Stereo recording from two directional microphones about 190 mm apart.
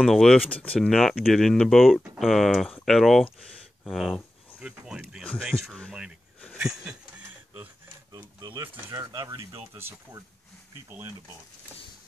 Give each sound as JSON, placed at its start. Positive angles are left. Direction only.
{"t": 0.0, "sound": "speech", "side_deg": 0}
{"t": 5.4, "sound": "a sound", "side_deg": 0}
{"t": 8.1, "sound": "speech", "side_deg": -20}
{"t": 9.8, "sound": "speech", "side_deg": -15}